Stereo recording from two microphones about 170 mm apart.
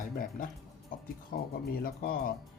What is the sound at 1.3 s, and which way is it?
Speech, 65° left (ahead or behind).